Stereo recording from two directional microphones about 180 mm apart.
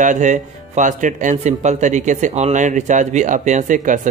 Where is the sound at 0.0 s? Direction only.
45° right (ahead or behind).